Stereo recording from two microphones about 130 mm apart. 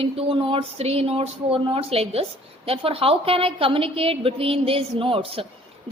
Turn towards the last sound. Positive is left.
turn(degrees=-45)  # may be behind; listen again after turning